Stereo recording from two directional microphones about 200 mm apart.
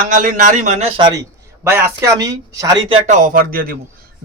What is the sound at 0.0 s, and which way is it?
A man's voice, 40° right (ahead or behind).